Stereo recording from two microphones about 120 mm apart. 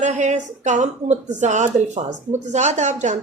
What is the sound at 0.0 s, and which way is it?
A woman's voice, 75° right (ahead or behind).